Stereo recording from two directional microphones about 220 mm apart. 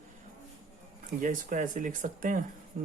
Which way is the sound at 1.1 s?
35° right (ahead or behind).